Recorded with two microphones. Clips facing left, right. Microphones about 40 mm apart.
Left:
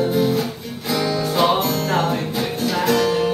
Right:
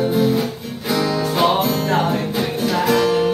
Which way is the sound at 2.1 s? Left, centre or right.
Centre.